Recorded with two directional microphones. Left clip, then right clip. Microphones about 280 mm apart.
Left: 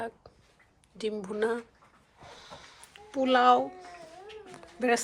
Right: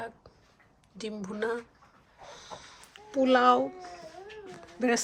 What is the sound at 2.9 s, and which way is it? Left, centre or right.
Speech, centre.